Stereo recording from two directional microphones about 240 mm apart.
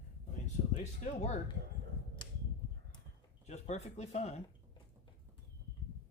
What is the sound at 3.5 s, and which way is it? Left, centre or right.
Speech, left.